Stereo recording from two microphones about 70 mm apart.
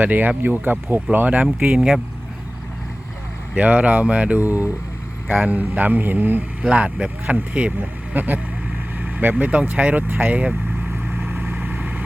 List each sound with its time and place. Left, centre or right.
0.0 s speech: right
3.5 s speech: right
6.7 s speech: centre
11.3 s vehicle: right